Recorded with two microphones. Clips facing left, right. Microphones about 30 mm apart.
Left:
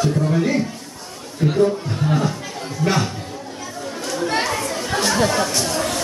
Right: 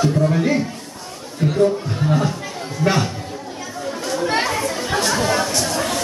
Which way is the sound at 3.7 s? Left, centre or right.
Centre.